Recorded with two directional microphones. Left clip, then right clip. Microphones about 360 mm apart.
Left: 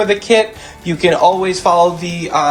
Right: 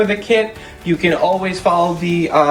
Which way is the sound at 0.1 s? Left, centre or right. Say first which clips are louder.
Left 3 dB; centre.